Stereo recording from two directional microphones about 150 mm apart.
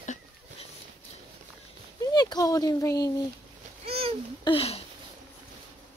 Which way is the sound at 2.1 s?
25° left (ahead or behind).